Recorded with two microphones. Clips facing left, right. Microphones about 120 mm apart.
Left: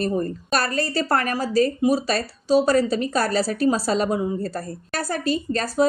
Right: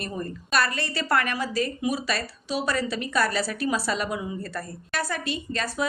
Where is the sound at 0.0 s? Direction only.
40° left (ahead or behind).